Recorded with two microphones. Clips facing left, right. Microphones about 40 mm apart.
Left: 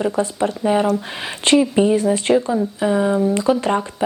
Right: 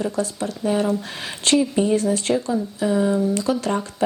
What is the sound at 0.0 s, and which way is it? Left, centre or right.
Speech, left.